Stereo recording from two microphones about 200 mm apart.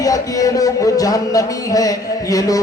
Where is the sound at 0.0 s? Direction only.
15° left (ahead or behind).